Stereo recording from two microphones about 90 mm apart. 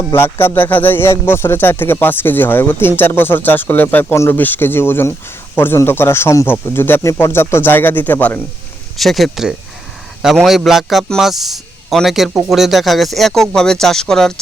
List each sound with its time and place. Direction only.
0.1 s speech: 25° left (ahead or behind)
9.0 s speech: centre (ahead or behind)